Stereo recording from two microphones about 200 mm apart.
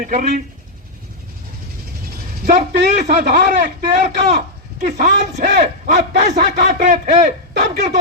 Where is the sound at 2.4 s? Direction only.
40° right (ahead or behind).